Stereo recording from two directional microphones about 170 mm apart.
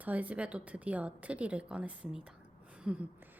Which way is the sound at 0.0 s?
10° right (ahead or behind).